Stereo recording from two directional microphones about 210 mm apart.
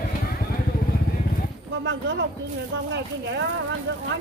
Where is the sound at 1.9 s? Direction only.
55° right (ahead or behind).